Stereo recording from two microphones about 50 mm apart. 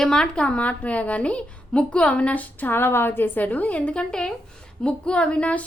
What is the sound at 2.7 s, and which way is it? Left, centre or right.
Speech, left.